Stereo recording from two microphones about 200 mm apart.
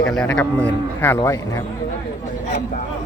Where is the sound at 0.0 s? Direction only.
5° left (ahead or behind).